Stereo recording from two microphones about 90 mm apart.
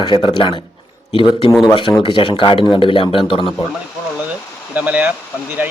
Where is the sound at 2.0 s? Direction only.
65° left (ahead or behind).